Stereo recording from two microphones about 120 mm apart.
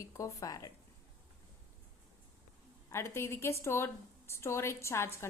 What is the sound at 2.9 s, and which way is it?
A woman's voice, 20° left (ahead or behind).